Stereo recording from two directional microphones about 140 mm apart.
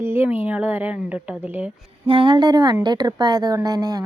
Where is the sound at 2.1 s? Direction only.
40° right (ahead or behind).